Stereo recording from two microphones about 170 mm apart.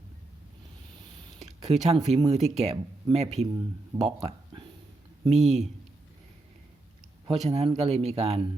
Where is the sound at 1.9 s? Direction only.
40° right (ahead or behind).